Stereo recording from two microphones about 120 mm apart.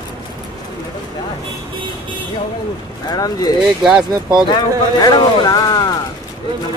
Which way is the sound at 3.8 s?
5° right (ahead or behind).